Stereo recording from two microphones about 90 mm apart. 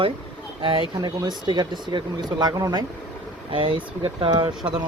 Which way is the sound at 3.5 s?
75° right (ahead or behind).